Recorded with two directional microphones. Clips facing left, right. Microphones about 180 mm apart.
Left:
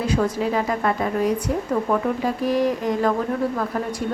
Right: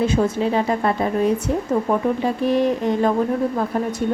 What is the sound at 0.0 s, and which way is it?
A woman's voice, 25° right (ahead or behind).